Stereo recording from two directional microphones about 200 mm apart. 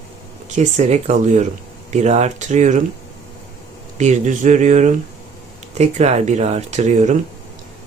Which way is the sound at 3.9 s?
35° right (ahead or behind).